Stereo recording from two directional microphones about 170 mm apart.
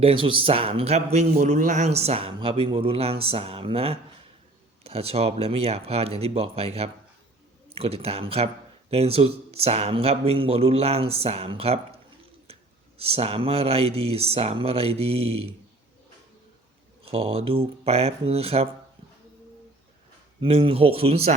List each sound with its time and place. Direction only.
0.0 s a man's voice: 30° right (ahead or behind)
7.7 s a man's voice: 35° right (ahead or behind)
12.5 s a sound: 35° right (ahead or behind)
13.0 s a man's voice: 35° right (ahead or behind)
17.1 s a man's voice: 35° right (ahead or behind)
20.4 s a man's voice: 30° right (ahead or behind)